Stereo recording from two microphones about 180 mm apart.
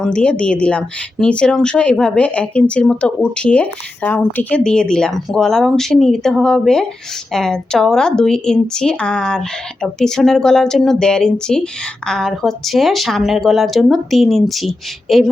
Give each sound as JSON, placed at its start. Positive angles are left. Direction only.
{"t": 0.0, "sound": "speech", "side_deg": 5}